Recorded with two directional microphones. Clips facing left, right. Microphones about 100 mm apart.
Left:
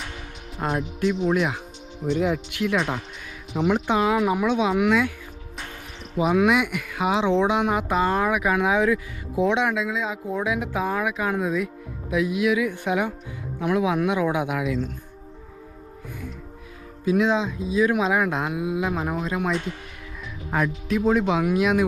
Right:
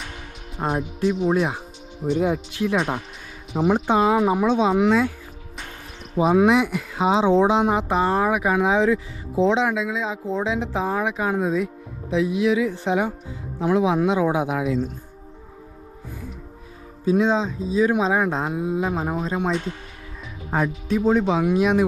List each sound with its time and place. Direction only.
1.0 s speech: 35° right (ahead or behind)
3.6 s speech: 45° right (ahead or behind)
6.1 s speech: 30° right (ahead or behind)
7.3 s speech: 45° right (ahead or behind)
7.5 s speech: 30° right (ahead or behind)
9.6 s speech: centre (ahead or behind)
10.2 s speech: 25° right (ahead or behind)
17.1 s speech: 35° right (ahead or behind)
20.5 s speech: 30° right (ahead or behind)